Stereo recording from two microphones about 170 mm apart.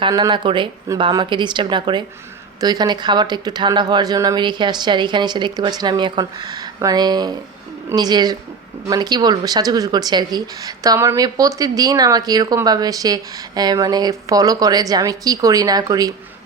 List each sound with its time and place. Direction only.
0.0 s speech: 25° right (ahead or behind)